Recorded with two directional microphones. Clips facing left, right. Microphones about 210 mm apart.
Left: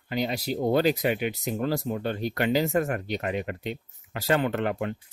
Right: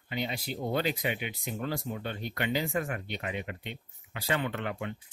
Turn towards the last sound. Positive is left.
turn(degrees=45)  # may be behind; listen again after turning